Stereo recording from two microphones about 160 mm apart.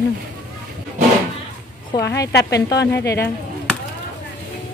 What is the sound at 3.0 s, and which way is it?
Speech, 90° left.